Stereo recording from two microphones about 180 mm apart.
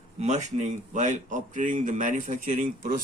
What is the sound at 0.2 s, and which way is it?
A man's voice, 40° right (ahead or behind).